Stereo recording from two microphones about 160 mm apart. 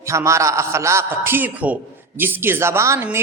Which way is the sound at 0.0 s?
20° right (ahead or behind).